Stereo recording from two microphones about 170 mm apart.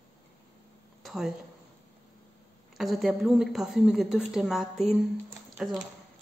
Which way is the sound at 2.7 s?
Centre (ahead or behind).